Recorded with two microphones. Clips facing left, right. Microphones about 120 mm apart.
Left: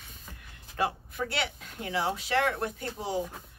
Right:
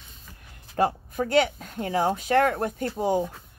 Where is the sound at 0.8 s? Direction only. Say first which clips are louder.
Right 6 dB; 45° right (ahead or behind).